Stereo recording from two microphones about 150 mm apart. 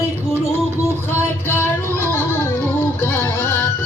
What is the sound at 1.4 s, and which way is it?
Music, 15° left (ahead or behind).